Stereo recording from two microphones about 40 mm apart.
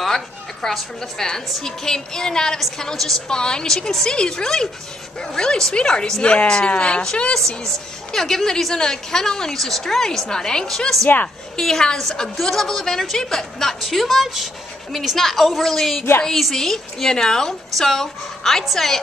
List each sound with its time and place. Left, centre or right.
0.0 s a woman's voice: centre; by 7.1 s left
7.3 s a woman's voice: centre
13.7 s a woman's voice: centre